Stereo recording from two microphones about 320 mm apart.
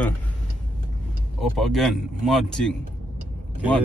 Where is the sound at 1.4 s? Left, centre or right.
Centre.